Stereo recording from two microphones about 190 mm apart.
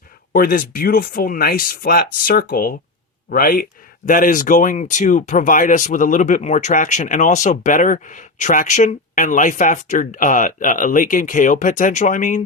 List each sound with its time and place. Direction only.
0.3 s speech: 45° left (ahead or behind)